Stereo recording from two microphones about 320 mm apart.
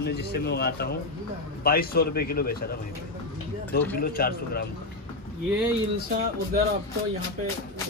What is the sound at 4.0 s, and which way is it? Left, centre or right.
Speech, left.